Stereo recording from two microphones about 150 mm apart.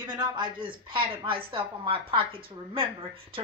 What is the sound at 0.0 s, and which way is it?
A woman's voice, 30° right (ahead or behind).